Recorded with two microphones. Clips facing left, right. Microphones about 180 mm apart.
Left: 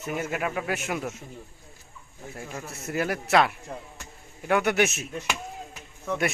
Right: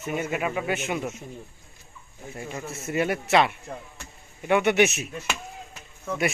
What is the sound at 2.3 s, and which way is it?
Speech, centre (ahead or behind).